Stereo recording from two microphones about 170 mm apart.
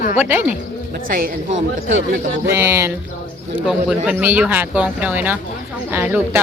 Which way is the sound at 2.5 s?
15° right (ahead or behind).